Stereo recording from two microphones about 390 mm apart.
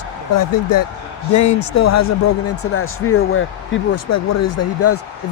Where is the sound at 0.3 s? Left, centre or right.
Left.